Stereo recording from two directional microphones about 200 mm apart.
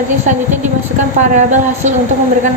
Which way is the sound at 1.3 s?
35° right (ahead or behind).